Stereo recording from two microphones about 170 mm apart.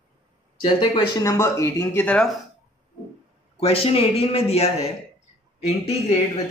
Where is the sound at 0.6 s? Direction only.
25° left (ahead or behind); by 2.3 s 5° left (ahead or behind).